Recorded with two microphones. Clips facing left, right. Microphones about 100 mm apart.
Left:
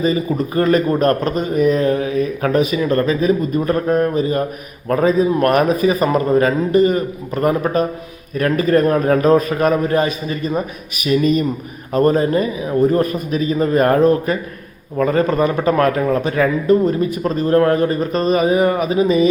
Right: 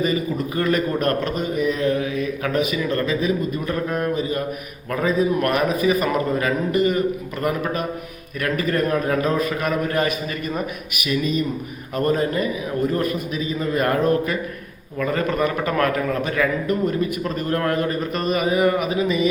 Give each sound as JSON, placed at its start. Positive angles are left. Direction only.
{"t": 0.0, "sound": "speech", "side_deg": 35}
{"t": 11.9, "sound": "speech", "side_deg": 35}